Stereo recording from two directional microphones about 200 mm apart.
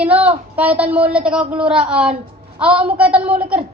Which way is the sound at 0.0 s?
5° right (ahead or behind).